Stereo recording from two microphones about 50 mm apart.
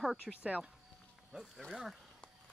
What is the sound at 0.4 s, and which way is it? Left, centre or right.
Speech, right.